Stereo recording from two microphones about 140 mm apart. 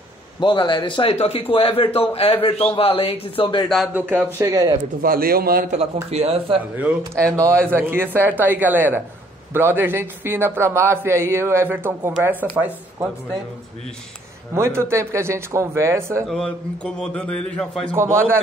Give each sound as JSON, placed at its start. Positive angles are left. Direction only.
{"t": 0.4, "sound": "a man's voice", "side_deg": 35}
{"t": 3.6, "sound": "speech", "side_deg": 0}
{"t": 3.9, "sound": "a man's voice", "side_deg": -10}
{"t": 4.4, "sound": "speech", "side_deg": -25}
{"t": 5.0, "sound": "a man's voice", "side_deg": -90}
{"t": 6.0, "sound": "speech", "side_deg": -50}
{"t": 7.0, "sound": "a man's voice", "side_deg": -20}
{"t": 14.5, "sound": "speech", "side_deg": -20}
{"t": 16.3, "sound": "a man's voice", "side_deg": 5}
{"t": 17.9, "sound": "speech", "side_deg": -20}